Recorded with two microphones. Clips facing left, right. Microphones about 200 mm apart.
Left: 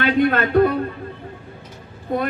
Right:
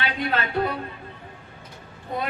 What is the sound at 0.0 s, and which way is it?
Speech, 50° left (ahead or behind).